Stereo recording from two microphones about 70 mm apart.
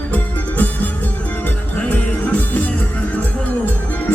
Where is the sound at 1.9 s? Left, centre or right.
Left.